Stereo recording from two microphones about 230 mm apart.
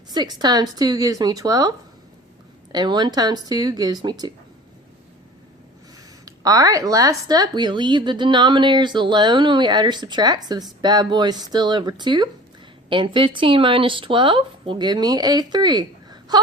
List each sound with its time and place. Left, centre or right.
0.1 s speech: centre
2.7 s speech: centre
6.2 s a woman's voice: centre